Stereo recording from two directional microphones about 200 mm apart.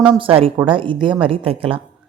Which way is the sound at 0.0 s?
25° right (ahead or behind).